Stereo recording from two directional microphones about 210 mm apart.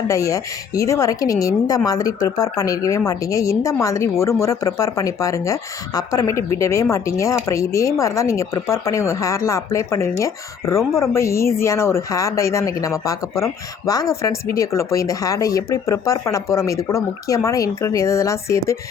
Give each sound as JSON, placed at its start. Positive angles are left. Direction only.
{"t": 0.1, "sound": "speech", "side_deg": 15}